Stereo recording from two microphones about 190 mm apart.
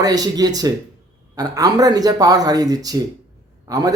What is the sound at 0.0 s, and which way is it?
Speech, 20° right (ahead or behind).